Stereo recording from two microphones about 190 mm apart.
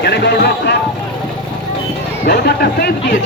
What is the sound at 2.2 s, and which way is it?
Speech, 55° left (ahead or behind).